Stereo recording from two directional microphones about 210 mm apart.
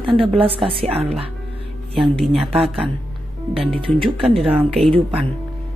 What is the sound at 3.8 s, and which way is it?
A woman's voice, 25° right (ahead or behind).